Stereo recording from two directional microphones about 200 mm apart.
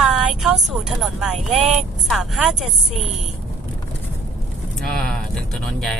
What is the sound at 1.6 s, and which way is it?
Speech, 35° right (ahead or behind).